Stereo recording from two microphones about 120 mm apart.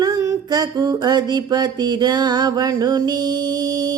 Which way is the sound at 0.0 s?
30° right (ahead or behind).